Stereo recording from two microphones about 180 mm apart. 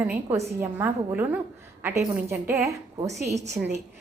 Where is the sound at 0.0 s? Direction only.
15° right (ahead or behind).